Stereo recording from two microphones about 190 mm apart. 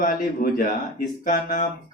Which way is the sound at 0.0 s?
45° left (ahead or behind).